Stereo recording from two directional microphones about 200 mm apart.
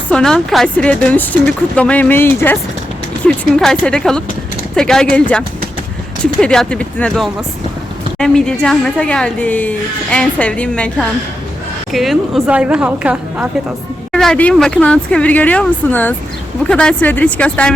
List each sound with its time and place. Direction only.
0.1 s speech: 5° left (ahead or behind)
6.4 s speech: 5° left (ahead or behind)